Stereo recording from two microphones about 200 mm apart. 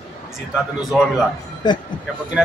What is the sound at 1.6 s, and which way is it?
Speech, 20° left (ahead or behind).